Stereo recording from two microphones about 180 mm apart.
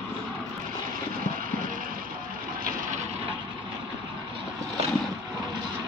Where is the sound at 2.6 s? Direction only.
50° right (ahead or behind).